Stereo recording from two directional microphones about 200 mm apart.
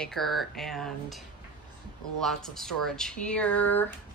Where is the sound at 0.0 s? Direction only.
Centre (ahead or behind).